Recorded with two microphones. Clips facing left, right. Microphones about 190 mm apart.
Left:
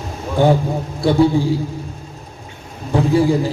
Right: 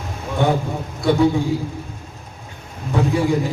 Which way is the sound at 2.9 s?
30° left (ahead or behind).